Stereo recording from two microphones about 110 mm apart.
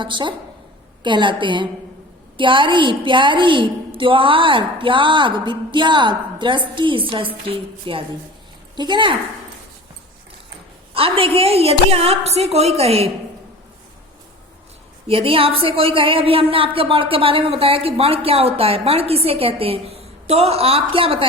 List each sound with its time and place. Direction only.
0.0 s a woman's voice: 50° right (ahead or behind)
8.7 s a woman's voice: 45° right (ahead or behind)
10.9 s a woman's voice: 55° right (ahead or behind)
15.0 s a woman's voice: 60° right (ahead or behind)